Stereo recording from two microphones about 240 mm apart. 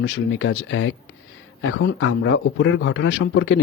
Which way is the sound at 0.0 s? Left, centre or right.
Left.